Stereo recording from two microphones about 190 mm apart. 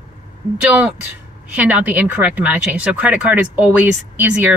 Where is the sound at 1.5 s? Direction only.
10° right (ahead or behind).